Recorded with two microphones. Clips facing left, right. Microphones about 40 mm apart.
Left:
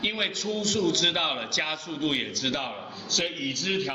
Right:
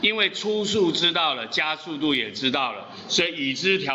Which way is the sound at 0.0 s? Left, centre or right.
Right.